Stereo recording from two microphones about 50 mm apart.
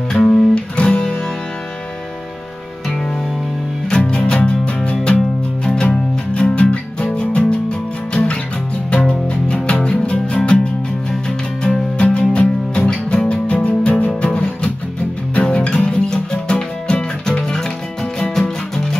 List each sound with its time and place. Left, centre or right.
0.1 s music: centre
0.7 s music: left
3.9 s music: centre